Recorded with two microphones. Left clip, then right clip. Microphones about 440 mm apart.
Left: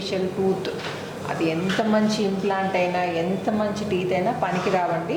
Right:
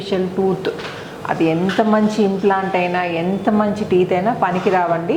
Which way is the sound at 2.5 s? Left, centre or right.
Right.